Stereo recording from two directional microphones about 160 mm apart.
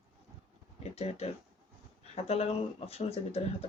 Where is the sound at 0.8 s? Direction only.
40° left (ahead or behind).